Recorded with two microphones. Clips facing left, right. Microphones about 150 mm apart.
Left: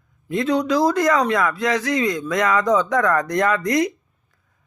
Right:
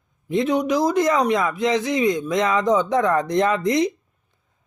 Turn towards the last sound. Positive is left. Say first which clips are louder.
# right 2 dB
turn(degrees=-25)  # may be behind; listen again after turning